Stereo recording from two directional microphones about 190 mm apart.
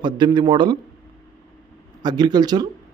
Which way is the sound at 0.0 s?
25° right (ahead or behind).